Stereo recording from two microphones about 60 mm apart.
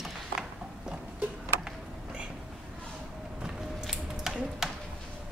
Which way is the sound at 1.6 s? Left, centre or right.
Centre.